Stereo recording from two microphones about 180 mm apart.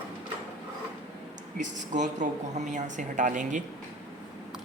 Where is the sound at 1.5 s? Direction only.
40° right (ahead or behind).